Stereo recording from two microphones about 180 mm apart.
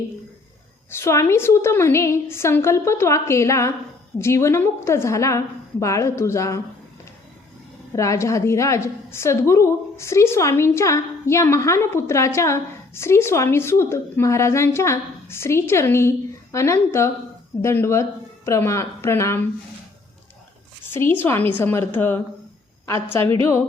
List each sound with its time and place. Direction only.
0.9 s a woman's voice: 15° left (ahead or behind)
7.9 s a woman's voice: 15° left (ahead or behind)
20.9 s a woman's voice: 10° left (ahead or behind)